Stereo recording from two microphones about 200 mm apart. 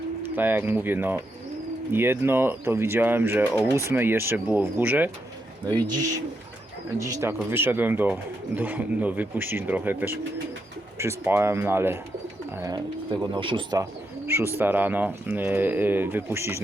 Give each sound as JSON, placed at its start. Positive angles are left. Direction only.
{"t": 0.2, "sound": "speech", "side_deg": -10}
{"t": 7.0, "sound": "speech", "side_deg": -15}
{"t": 13.3, "sound": "speech", "side_deg": -25}
{"t": 14.3, "sound": "speech", "side_deg": -10}